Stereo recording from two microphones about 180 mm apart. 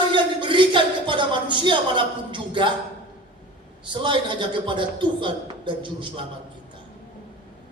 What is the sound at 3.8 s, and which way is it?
Speech, 25° right (ahead or behind).